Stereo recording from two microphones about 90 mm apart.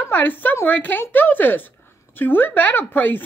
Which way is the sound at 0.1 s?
20° left (ahead or behind).